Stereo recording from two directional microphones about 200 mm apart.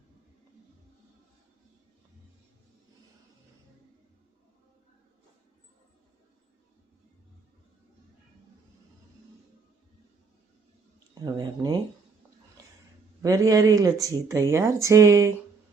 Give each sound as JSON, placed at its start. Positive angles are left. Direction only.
{"t": 11.2, "sound": "speech", "side_deg": -20}
{"t": 13.2, "sound": "speech", "side_deg": -20}